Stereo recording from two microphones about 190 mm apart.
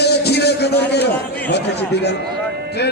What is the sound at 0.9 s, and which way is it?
A man's voice, 60° left (ahead or behind).